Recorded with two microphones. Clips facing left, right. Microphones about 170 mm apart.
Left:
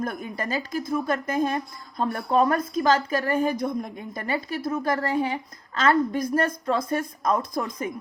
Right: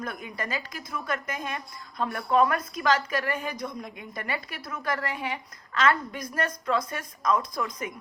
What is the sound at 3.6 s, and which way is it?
Speech, 55° left (ahead or behind).